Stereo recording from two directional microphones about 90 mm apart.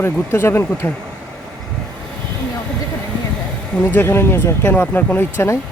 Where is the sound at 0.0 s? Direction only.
30° left (ahead or behind).